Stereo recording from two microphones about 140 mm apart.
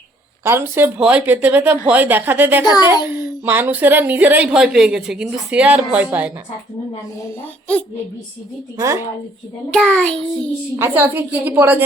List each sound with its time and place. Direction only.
0.4 s a child's voice: 15° right (ahead or behind)
8.8 s speech: 20° right (ahead or behind)
9.7 s child singing: 5° left (ahead or behind)
10.8 s a child's voice: 15° right (ahead or behind)